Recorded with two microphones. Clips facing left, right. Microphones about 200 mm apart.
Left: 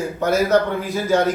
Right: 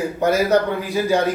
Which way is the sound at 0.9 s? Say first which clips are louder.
Even; 15° right (ahead or behind).